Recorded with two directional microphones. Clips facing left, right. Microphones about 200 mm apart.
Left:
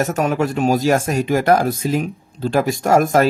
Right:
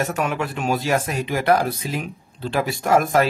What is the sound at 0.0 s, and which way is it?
Speech, 40° left (ahead or behind).